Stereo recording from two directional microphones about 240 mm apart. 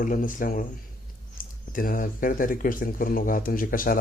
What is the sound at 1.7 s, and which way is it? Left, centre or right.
Speech, left.